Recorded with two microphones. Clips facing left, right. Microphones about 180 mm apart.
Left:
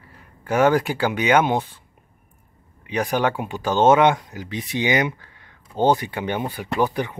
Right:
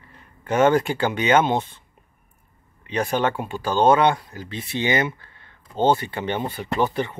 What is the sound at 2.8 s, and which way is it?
Speech, 10° left (ahead or behind).